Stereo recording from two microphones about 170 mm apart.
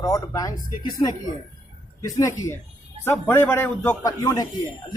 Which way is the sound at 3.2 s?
15° left (ahead or behind).